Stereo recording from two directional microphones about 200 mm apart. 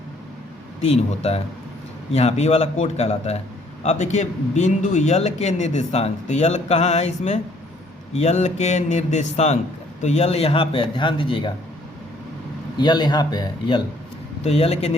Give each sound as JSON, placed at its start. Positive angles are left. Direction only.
{"t": 0.9, "sound": "a man's voice", "side_deg": 30}
{"t": 12.7, "sound": "a man's voice", "side_deg": 20}